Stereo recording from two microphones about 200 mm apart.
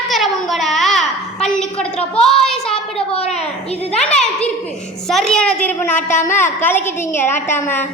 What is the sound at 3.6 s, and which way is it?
Speech, 30° left (ahead or behind).